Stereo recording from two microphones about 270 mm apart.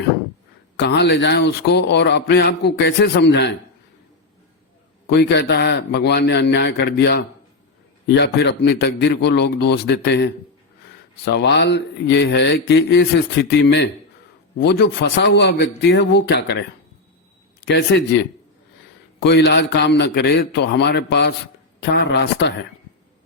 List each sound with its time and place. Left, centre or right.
0.9 s a man's voice: left
5.0 s a man's voice: left
11.3 s a man's voice: left
17.7 s a man's voice: left
19.2 s a man's voice: left